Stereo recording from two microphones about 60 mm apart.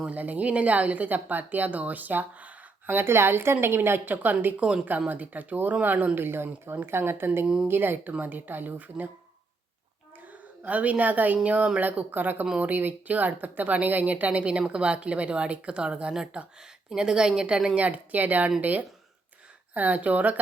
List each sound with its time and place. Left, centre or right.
0.0 s speech: right
2.8 s a woman's voice: right
7.4 s a woman's voice: centre
7.7 s a woman's voice: right
10.6 s a woman's voice: right